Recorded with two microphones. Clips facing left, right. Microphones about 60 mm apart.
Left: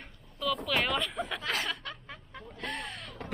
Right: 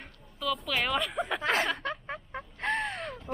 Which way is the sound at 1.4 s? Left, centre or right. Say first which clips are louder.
Right 7 dB; right.